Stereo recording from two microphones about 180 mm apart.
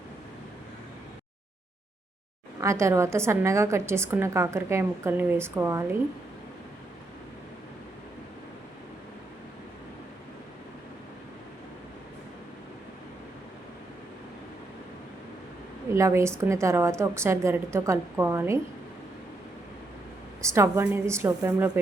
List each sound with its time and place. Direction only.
2.6 s a woman's voice: 15° right (ahead or behind)
16.0 s a woman's voice: 15° right (ahead or behind)
20.4 s a woman's voice: 15° right (ahead or behind)